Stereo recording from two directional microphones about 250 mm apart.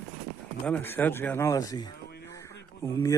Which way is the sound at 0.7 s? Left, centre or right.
Centre.